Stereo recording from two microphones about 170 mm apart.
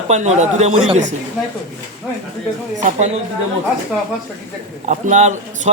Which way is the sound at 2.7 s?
45° right (ahead or behind).